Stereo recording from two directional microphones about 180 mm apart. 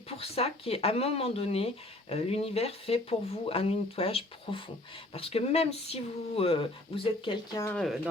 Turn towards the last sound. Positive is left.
turn(degrees=0)  # may be behind; listen again after turning